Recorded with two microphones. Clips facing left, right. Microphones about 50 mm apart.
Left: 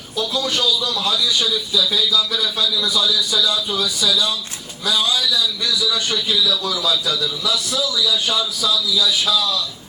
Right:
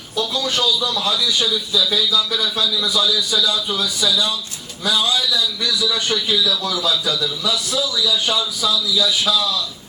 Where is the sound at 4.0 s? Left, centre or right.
Centre.